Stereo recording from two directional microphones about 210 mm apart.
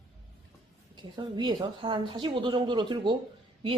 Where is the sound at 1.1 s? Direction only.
20° right (ahead or behind).